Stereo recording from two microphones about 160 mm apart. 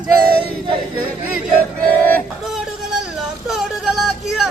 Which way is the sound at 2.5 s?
5° right (ahead or behind).